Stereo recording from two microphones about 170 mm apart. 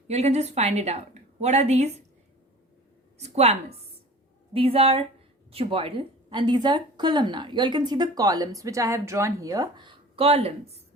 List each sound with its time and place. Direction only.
0.1 s a woman's voice: 40° right (ahead or behind)
3.2 s a woman's voice: 40° right (ahead or behind)